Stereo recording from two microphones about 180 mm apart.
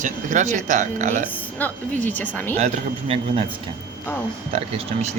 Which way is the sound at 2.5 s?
35° right (ahead or behind).